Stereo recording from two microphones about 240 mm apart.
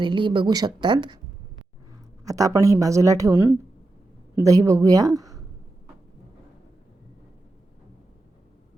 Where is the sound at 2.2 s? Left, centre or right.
Centre.